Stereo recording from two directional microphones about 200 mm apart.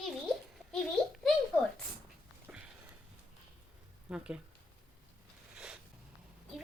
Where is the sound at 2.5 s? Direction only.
5° right (ahead or behind).